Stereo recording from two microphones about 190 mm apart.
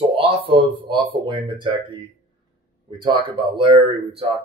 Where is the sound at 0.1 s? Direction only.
30° right (ahead or behind).